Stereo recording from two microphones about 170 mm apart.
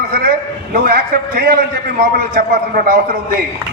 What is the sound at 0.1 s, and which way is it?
A man's voice, 60° right (ahead or behind).